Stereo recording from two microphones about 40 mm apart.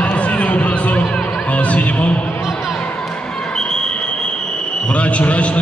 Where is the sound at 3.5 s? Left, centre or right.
Centre.